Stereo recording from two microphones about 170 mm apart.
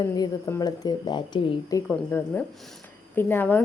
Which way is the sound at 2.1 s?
10° left (ahead or behind).